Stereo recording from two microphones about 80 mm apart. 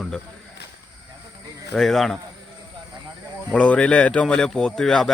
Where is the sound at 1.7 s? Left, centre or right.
Centre.